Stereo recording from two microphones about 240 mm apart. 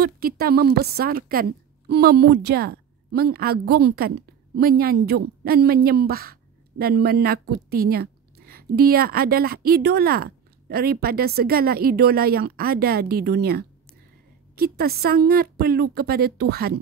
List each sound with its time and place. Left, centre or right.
0.0 s speech: right